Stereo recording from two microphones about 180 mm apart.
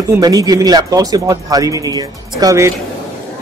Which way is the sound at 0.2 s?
20° right (ahead or behind).